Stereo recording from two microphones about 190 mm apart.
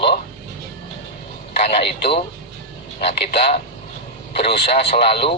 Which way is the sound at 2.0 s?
30° left (ahead or behind).